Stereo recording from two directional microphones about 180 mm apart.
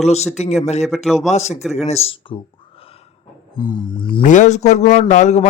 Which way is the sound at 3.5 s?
25° left (ahead or behind).